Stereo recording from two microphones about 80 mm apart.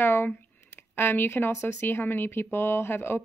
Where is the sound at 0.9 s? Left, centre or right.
Left.